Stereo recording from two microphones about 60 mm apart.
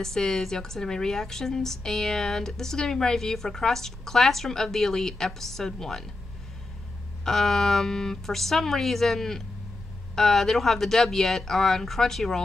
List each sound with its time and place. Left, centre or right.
0.0 s speech: centre
7.2 s speech: centre